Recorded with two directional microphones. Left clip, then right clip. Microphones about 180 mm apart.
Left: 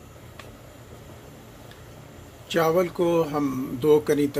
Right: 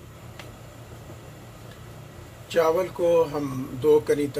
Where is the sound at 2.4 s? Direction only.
45° left (ahead or behind).